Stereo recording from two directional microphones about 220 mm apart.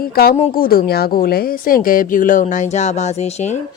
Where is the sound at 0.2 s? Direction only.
45° left (ahead or behind).